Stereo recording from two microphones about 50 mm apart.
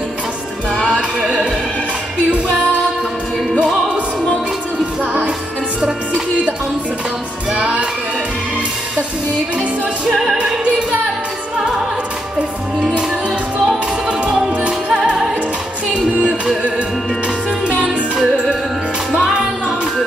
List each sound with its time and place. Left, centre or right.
0.7 s music: centre
7.5 s music: right
10.0 s music: centre
10.3 s music: right
12.4 s music: right
15.9 s music: centre
17.8 s music: centre